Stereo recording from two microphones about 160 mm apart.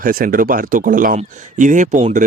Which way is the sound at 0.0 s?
60° right (ahead or behind).